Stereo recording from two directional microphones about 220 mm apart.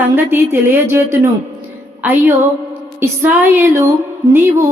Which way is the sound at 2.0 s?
10° right (ahead or behind).